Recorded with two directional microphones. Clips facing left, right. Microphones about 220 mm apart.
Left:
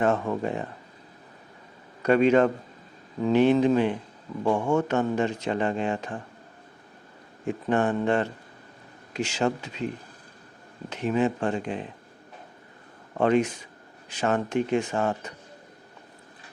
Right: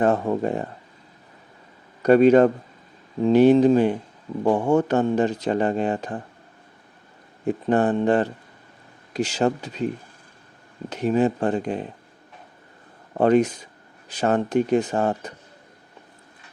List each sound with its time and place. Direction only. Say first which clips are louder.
0.0 s speech: right 4 dB; 35° right (ahead or behind)
2.0 s a man's voice: right 5 dB; 40° right (ahead or behind)
7.4 s speech: right 4 dB; 35° right (ahead or behind)
13.1 s speech: right 4 dB; 40° right (ahead or behind)